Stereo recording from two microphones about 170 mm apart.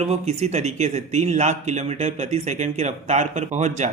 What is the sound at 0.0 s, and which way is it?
Speech, 40° right (ahead or behind).